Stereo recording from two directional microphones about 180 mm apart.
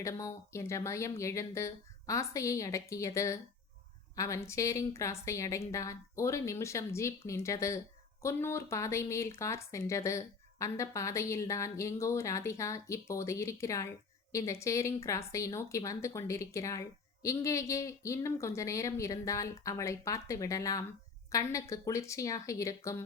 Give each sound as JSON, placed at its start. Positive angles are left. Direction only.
{"t": 0.0, "sound": "speech", "side_deg": 15}